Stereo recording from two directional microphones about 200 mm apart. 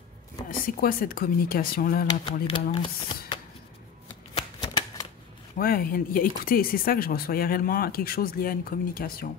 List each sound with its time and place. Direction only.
0.5 s speech: 45° left (ahead or behind)
2.0 s speech: 25° left (ahead or behind)
5.6 s speech: 45° left (ahead or behind)